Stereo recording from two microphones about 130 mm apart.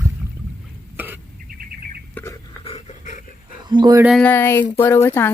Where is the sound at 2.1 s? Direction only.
20° left (ahead or behind).